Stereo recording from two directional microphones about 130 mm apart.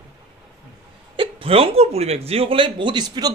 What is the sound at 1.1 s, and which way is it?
Speech, 45° right (ahead or behind).